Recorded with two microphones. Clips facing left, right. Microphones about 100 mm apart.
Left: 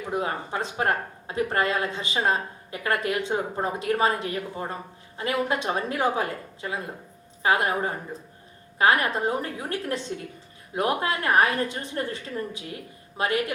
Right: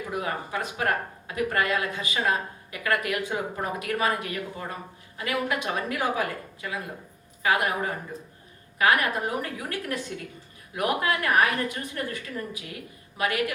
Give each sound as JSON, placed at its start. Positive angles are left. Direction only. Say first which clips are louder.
{"t": 0.1, "sound": "a woman's voice", "louder": "left 3 dB", "side_deg": 30}